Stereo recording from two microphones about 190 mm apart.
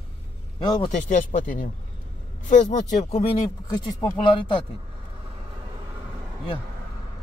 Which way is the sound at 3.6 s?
20° left (ahead or behind).